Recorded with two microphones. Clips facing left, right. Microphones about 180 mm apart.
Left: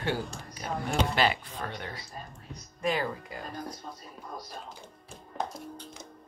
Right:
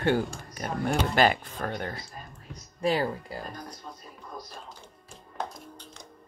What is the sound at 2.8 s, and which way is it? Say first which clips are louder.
Speech: right 3 dB; 35° right (ahead or behind).